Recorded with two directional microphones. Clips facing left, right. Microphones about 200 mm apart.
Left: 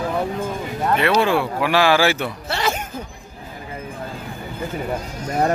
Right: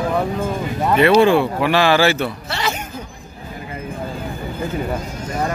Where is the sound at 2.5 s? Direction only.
50° left (ahead or behind).